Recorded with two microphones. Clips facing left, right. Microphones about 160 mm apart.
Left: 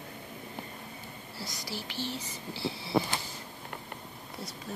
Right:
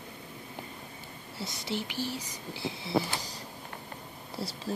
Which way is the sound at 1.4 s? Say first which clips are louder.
Right 6 dB; 25° right (ahead or behind).